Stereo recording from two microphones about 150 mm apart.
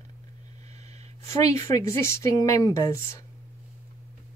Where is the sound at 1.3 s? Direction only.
20° left (ahead or behind).